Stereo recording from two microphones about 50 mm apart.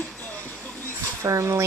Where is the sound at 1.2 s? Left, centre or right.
Right.